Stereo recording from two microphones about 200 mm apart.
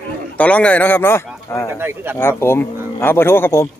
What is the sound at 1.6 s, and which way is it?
Speech, 10° right (ahead or behind).